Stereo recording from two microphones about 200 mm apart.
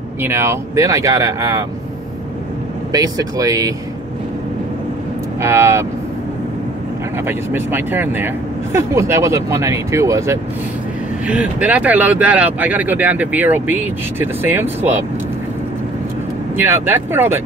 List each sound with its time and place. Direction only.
0.2 s speech: 10° right (ahead or behind)
2.9 s speech: 20° right (ahead or behind)
5.4 s speech: 15° right (ahead or behind)
7.2 s speech: 10° right (ahead or behind)
16.5 s speech: 10° right (ahead or behind)